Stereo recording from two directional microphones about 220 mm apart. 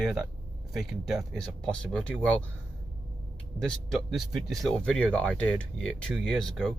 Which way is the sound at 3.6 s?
Centre (ahead or behind).